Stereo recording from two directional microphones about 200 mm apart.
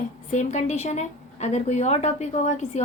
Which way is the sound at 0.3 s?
35° left (ahead or behind).